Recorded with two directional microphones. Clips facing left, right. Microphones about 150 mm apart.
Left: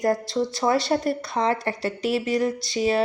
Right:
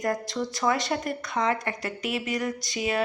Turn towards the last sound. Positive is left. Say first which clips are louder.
# left 6 dB
turn(degrees=30)  # may be behind; listen again after turning